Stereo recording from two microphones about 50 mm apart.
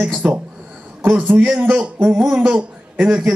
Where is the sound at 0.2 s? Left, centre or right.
Right.